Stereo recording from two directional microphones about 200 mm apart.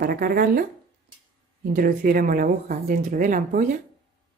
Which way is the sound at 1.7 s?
45° right (ahead or behind).